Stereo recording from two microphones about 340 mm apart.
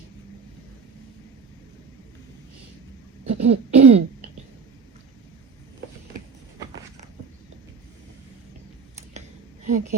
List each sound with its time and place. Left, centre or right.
3.2 s throat clearing: centre
9.6 s a woman's voice: right